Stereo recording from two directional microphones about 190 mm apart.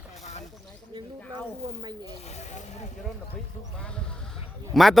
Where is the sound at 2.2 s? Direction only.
35° left (ahead or behind).